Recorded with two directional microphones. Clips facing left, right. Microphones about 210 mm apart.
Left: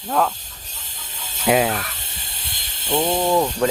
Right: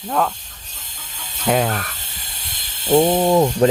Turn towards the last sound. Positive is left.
turn(degrees=-20)  # may be behind; listen again after turning